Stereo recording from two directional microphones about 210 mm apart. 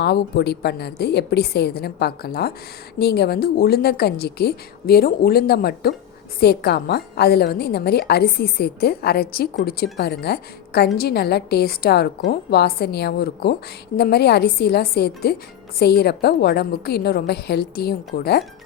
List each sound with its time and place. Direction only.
0.0 s a woman's voice: 50° left (ahead or behind)